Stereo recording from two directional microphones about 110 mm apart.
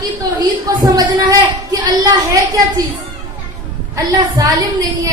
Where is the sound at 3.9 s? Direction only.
30° right (ahead or behind).